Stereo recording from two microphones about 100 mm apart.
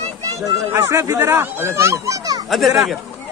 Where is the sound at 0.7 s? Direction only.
30° right (ahead or behind).